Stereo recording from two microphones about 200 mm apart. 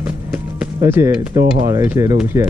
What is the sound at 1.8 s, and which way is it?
Speech, 15° right (ahead or behind).